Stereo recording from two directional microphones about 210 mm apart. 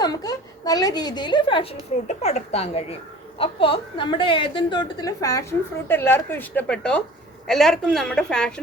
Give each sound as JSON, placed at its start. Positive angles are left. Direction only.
{"t": 0.0, "sound": "a woman's voice", "side_deg": 20}